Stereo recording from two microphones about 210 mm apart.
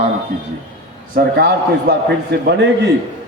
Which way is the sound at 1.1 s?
45° right (ahead or behind).